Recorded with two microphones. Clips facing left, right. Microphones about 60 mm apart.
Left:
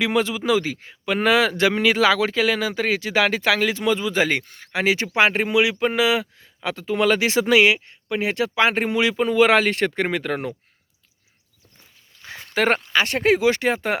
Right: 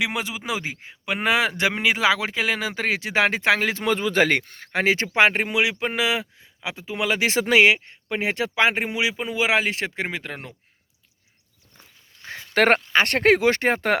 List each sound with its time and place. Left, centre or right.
0.0 s a man's voice: centre; by 5.0 s right
5.1 s a man's voice: right
6.6 s speech: centre
7.2 s a man's voice: right; by 10.5 s centre
12.5 s speech: right